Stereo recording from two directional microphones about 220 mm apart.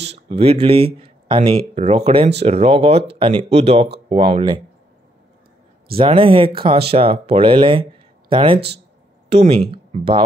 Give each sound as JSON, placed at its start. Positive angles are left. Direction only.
{"t": 0.0, "sound": "speech", "side_deg": -30}
{"t": 5.9, "sound": "speech", "side_deg": -25}
{"t": 8.5, "sound": "speech", "side_deg": -50}
{"t": 9.3, "sound": "speech", "side_deg": -25}